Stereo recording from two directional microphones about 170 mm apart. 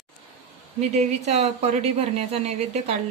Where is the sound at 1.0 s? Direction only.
40° right (ahead or behind).